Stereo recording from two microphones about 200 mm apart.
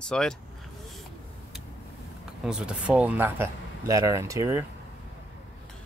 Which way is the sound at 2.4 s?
5° right (ahead or behind).